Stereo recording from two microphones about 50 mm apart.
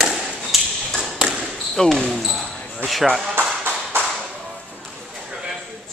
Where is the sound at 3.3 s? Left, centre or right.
Right.